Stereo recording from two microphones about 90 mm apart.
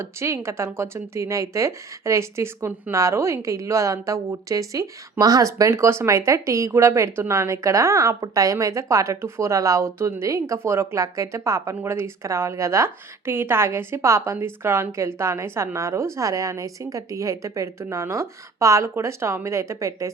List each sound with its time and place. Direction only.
0.0 s speech: 30° right (ahead or behind)